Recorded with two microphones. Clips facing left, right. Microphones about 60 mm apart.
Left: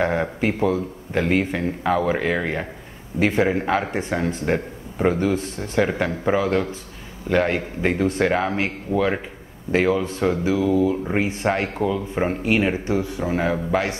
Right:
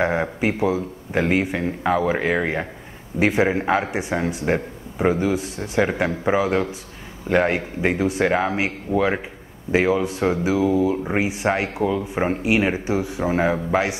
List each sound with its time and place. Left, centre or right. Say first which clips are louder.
0.0 s speech: even; centre